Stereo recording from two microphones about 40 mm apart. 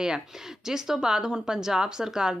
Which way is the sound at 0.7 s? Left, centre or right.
Centre.